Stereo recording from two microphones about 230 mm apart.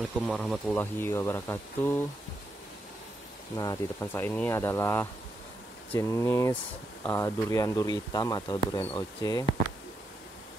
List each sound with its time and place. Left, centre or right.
0.3 s speech: centre
3.5 s speech: centre